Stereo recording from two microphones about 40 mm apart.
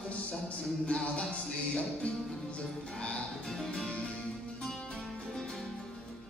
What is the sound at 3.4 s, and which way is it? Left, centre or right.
Music, centre.